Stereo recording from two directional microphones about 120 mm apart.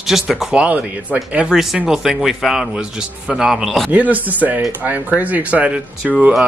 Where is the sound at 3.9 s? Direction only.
15° right (ahead or behind).